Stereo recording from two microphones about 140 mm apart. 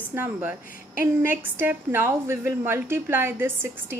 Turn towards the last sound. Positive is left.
turn(degrees=-15)  # may be behind; listen again after turning